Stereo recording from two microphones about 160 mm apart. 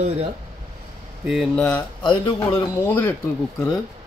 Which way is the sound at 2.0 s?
30° left (ahead or behind).